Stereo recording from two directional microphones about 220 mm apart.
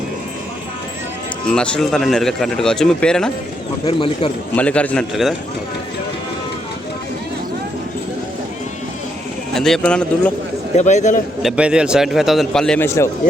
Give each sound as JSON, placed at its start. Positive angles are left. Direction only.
{"t": 1.5, "sound": "speech", "side_deg": 5}
{"t": 3.8, "sound": "speech", "side_deg": 25}
{"t": 4.5, "sound": "speech", "side_deg": 5}
{"t": 9.6, "sound": "speech", "side_deg": 0}
{"t": 10.8, "sound": "a man's voice", "side_deg": 30}
{"t": 11.4, "sound": "speech", "side_deg": -5}